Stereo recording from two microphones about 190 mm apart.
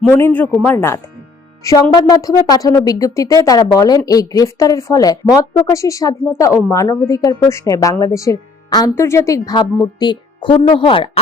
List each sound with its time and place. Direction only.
0.1 s speech: 10° left (ahead or behind); by 11.2 s 30° left (ahead or behind)